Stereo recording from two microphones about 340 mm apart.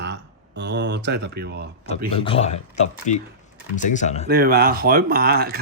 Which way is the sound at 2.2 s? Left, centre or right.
Centre.